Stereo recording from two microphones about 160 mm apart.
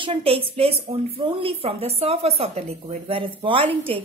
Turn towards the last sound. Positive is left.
turn(degrees=-35)  # may be behind; listen again after turning